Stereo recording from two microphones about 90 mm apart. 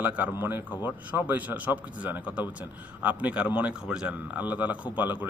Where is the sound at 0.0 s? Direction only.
15° right (ahead or behind).